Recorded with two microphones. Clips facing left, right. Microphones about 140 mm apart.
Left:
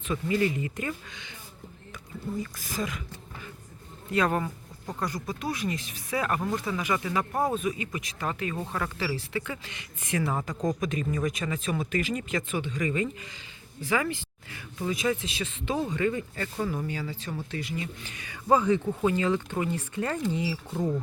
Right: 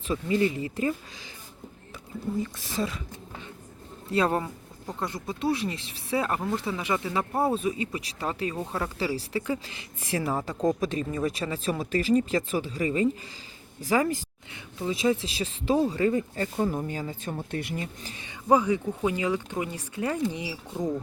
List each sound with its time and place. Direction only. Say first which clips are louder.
0.1 s speech: right 1 dB; 30° right (ahead or behind)
2.4 s speech: right 3 dB; 25° right (ahead or behind)
4.1 s speech: right 1 dB; 30° right (ahead or behind)
14.8 s speech: right 3 dB; 30° right (ahead or behind); by 17.8 s 55° right (ahead or behind)
18.0 s speech: right 2 dB; 30° right (ahead or behind)
18.4 s speech: even; 10° right (ahead or behind)
20.7 s speech: right 3 dB; 5° left (ahead or behind)